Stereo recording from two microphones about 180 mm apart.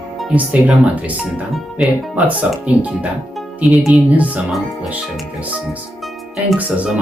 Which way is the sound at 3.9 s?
10° right (ahead or behind).